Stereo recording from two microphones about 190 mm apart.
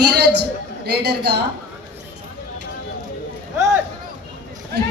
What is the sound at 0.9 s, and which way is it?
Speech, 60° right (ahead or behind).